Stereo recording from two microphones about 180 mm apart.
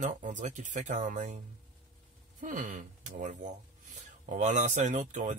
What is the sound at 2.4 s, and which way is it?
Speech, 45° right (ahead or behind).